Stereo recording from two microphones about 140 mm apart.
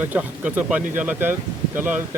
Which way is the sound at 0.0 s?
10° right (ahead or behind).